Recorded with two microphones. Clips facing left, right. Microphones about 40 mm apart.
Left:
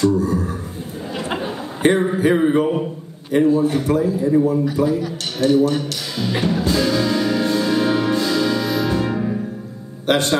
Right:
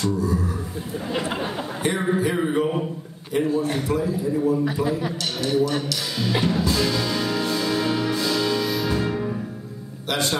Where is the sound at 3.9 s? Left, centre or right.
Left.